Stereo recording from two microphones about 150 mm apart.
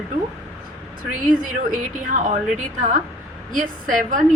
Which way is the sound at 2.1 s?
60° right (ahead or behind).